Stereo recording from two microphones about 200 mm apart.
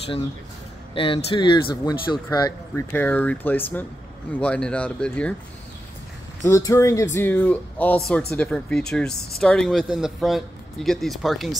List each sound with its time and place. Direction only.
0.9 s speech: 25° left (ahead or behind); by 5.3 s 5° left (ahead or behind)
6.7 s speech: 15° left (ahead or behind)
9.1 s speech: 55° left (ahead or behind)
9.4 s speech: 5° left (ahead or behind)